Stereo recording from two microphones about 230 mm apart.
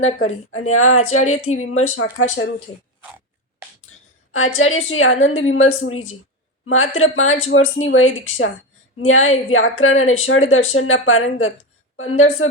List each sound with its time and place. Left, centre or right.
0.6 s speech: left
4.3 s speech: left